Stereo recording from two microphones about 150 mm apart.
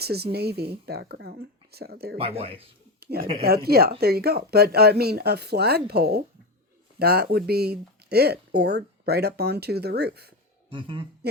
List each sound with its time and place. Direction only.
0.0 s speech: 90° right
2.1 s speech: 40° right (ahead or behind)
3.0 s speech: 90° right
10.7 s speech: 35° right (ahead or behind)